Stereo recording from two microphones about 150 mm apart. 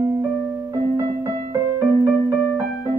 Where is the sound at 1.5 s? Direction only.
15° right (ahead or behind).